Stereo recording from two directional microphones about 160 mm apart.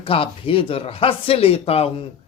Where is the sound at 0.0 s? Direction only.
35° left (ahead or behind).